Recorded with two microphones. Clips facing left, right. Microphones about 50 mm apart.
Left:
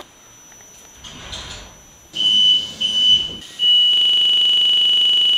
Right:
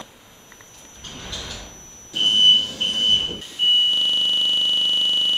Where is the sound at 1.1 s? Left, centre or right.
Left.